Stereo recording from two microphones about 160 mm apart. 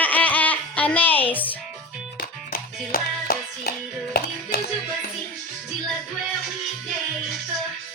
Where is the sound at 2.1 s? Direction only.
65° left (ahead or behind).